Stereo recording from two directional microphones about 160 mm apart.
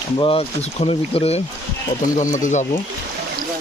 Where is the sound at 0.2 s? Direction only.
35° left (ahead or behind).